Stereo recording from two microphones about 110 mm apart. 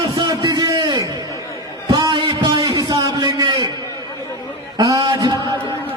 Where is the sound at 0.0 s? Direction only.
40° right (ahead or behind).